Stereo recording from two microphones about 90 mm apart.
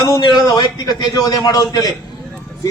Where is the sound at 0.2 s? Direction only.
55° left (ahead or behind).